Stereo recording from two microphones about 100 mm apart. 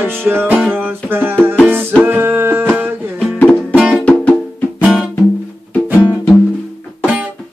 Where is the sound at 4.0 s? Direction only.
10° left (ahead or behind).